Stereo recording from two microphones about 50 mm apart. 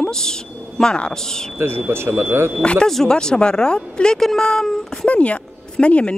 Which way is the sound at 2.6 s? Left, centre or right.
Left.